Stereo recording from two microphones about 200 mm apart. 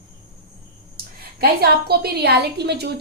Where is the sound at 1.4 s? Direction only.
50° right (ahead or behind).